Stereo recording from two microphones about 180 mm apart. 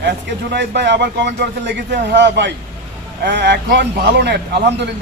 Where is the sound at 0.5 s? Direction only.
75° right (ahead or behind).